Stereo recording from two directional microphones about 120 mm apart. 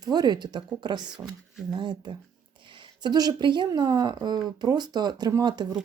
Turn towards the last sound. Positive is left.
turn(degrees=-35)  # may be behind; listen again after turning